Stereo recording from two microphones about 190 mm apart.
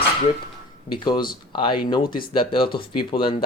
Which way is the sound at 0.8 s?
25° left (ahead or behind).